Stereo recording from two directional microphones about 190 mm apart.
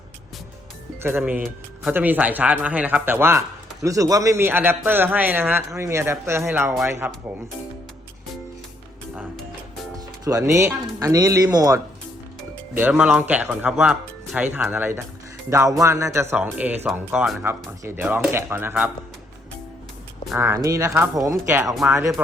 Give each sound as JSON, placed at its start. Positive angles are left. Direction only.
{"t": 1.0, "sound": "a man's voice", "side_deg": -10}
{"t": 10.2, "sound": "speech", "side_deg": -15}
{"t": 12.7, "sound": "a man's voice", "side_deg": -10}
{"t": 20.4, "sound": "a man's voice", "side_deg": -15}